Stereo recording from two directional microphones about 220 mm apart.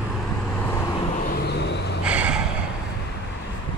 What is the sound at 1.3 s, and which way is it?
Vehicle, 50° left (ahead or behind).